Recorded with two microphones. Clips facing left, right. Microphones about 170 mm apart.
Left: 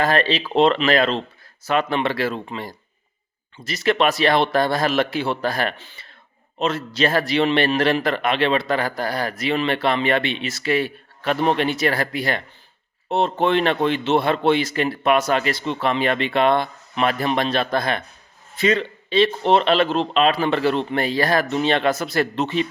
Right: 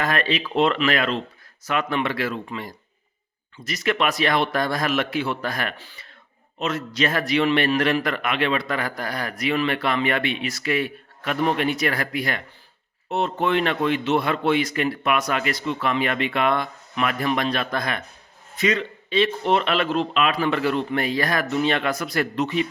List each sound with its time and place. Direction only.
0.0 s a man's voice: 30° left (ahead or behind)